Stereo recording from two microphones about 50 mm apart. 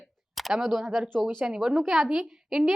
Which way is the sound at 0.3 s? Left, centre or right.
Centre.